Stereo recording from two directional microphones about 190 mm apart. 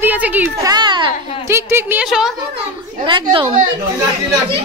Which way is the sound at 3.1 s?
25° right (ahead or behind).